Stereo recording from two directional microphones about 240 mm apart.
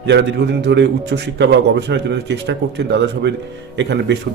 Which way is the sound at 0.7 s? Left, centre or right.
Right.